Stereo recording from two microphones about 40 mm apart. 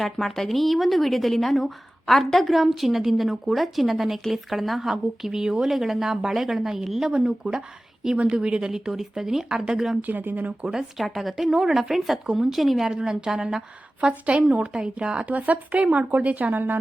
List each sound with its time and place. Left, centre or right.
0.0 s a woman's voice: centre
7.4 s a woman's voice: right
8.7 s a woman's voice: centre
10.0 s speech: right
10.9 s a woman's voice: centre
12.9 s a woman's voice: centre
14.1 s a woman's voice: right
15.2 s speech: right